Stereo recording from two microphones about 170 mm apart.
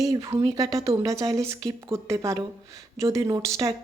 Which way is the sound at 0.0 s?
20° right (ahead or behind).